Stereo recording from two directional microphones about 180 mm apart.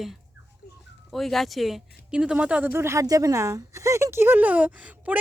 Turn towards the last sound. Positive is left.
turn(degrees=-10)  # may be behind; listen again after turning